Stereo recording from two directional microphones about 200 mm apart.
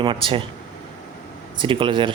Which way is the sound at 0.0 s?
25° right (ahead or behind).